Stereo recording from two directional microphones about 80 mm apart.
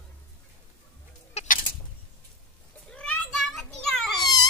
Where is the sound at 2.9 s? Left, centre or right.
Centre.